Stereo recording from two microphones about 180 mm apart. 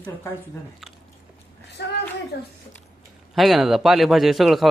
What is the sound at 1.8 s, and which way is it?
Speech, 70° left (ahead or behind).